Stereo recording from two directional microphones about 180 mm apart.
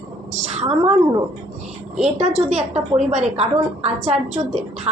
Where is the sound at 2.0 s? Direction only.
40° right (ahead or behind).